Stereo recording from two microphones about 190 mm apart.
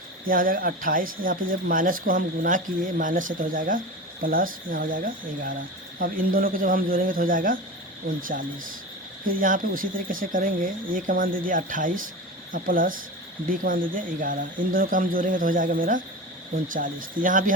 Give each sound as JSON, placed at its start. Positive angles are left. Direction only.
{"t": 0.3, "sound": "speech", "side_deg": -45}
{"t": 9.2, "sound": "speech", "side_deg": -45}